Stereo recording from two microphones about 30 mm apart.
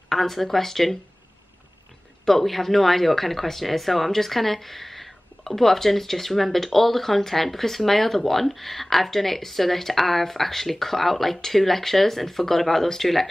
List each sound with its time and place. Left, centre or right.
0.1 s speech: centre
2.2 s speech: centre